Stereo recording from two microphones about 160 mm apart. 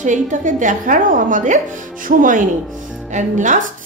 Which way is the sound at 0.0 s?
50° right (ahead or behind).